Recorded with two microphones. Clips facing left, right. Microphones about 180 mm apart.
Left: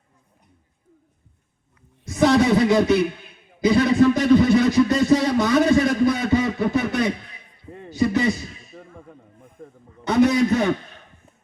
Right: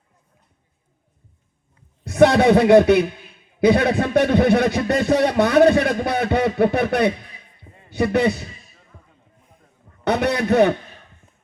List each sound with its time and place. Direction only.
2.0 s speech: 65° right (ahead or behind)
8.7 s basketball bounce: 70° left (ahead or behind)
9.4 s a sound: 50° left (ahead or behind)
10.0 s speech: 65° right (ahead or behind)